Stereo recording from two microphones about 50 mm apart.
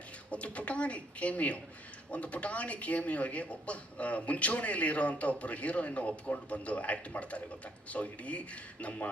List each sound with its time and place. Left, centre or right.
0.3 s speech: left